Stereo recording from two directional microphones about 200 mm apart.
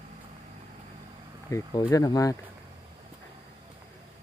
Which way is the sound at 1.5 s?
15° left (ahead or behind).